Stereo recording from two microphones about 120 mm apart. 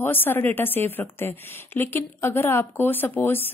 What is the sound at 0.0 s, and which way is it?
A woman's voice, 15° left (ahead or behind).